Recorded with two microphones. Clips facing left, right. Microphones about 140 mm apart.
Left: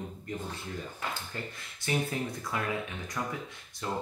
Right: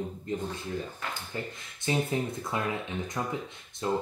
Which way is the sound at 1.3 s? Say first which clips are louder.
Right 3 dB; 20° right (ahead or behind).